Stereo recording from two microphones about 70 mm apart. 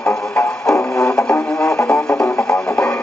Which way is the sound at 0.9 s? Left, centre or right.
Centre.